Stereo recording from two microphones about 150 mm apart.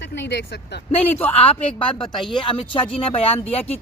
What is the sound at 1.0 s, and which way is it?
Speech, 15° left (ahead or behind).